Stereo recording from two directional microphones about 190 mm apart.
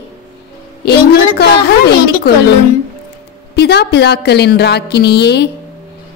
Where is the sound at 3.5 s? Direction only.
60° left (ahead or behind).